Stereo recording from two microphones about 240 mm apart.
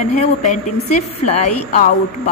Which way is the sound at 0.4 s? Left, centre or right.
Left.